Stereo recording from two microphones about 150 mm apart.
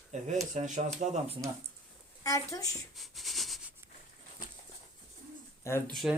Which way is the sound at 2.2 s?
25° left (ahead or behind).